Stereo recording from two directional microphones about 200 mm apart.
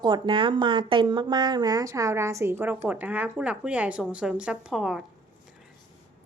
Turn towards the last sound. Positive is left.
turn(degrees=0)  # may be behind; listen again after turning